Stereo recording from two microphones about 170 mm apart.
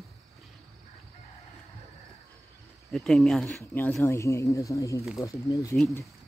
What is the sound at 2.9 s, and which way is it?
Speech, centre (ahead or behind).